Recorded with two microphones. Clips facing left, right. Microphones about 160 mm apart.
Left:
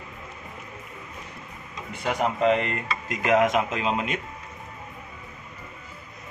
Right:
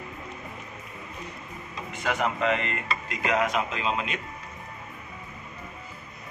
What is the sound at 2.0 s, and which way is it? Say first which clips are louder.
Speech: left 4 dB; 35° left (ahead or behind).